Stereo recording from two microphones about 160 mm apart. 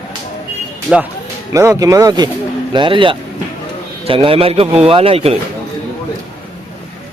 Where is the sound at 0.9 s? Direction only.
Centre (ahead or behind).